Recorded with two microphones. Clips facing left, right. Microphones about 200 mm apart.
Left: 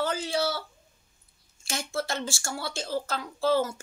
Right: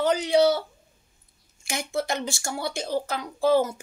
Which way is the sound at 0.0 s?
20° right (ahead or behind).